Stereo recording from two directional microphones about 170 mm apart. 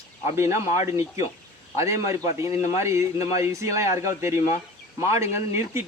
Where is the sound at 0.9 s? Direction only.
15° right (ahead or behind).